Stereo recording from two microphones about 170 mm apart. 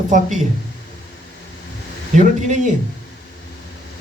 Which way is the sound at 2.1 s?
45° right (ahead or behind).